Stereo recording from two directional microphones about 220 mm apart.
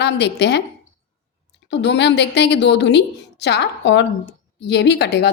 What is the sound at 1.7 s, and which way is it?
A woman's voice, 55° left (ahead or behind).